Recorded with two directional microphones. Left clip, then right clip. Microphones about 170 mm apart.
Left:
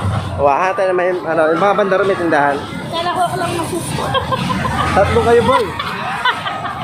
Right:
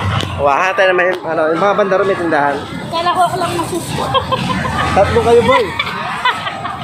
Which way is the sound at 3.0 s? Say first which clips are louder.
Right 4 dB; 20° right (ahead or behind).